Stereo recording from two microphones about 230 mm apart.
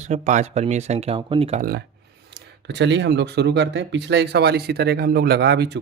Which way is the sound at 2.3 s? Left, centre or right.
Right.